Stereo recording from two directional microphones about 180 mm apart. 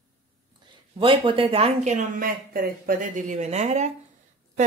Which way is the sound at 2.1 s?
55° right (ahead or behind).